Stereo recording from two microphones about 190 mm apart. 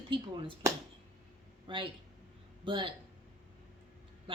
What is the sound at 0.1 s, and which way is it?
Speech, 25° right (ahead or behind).